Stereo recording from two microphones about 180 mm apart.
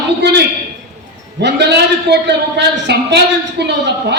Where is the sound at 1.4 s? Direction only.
70° right (ahead or behind).